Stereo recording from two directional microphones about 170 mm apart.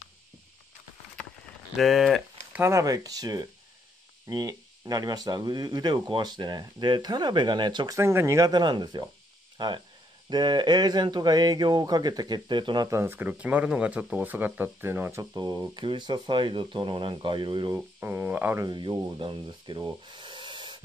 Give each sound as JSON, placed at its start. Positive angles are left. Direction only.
{"t": 1.8, "sound": "speech", "side_deg": 0}
{"t": 2.6, "sound": "speech", "side_deg": -20}
{"t": 17.7, "sound": "speech", "side_deg": -10}
{"t": 18.7, "sound": "rub", "side_deg": -25}